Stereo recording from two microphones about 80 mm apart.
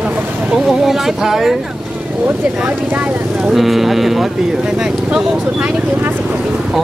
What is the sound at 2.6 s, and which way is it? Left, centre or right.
Speech, centre.